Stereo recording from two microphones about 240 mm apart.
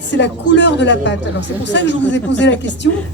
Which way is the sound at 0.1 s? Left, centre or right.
Left.